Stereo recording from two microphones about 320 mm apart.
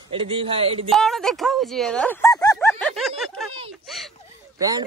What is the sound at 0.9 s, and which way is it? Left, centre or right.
Speech, centre.